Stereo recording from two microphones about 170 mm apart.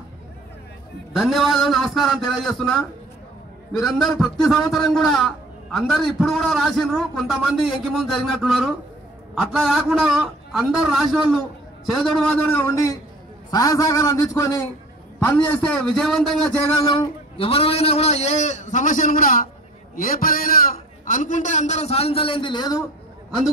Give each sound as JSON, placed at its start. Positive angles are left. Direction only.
{"t": 1.1, "sound": "a man's voice", "side_deg": 0}
{"t": 16.5, "sound": "speech", "side_deg": 15}
{"t": 16.9, "sound": "a man's voice", "side_deg": 30}